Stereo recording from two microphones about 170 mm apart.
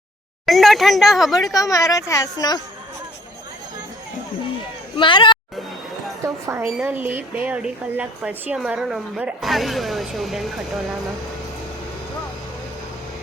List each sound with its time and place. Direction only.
0.4 s speech: centre (ahead or behind)
1.5 s a woman's voice: 20° left (ahead or behind)
4.9 s a woman's voice: 30° left (ahead or behind)
6.2 s a woman's voice: 15° right (ahead or behind); by 10.5 s centre (ahead or behind)